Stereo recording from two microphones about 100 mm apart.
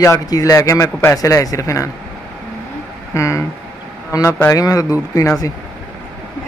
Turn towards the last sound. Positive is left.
turn(degrees=30)  # may be behind; listen again after turning